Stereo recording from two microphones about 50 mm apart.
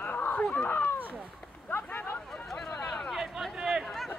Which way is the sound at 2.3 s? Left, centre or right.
Centre.